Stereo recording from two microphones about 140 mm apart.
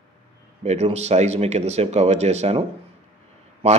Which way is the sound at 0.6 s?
50° right (ahead or behind).